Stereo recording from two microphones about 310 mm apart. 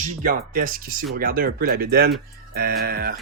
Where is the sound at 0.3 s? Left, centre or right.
Right.